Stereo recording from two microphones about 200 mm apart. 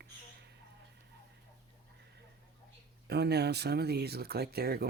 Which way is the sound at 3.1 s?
55° right (ahead or behind).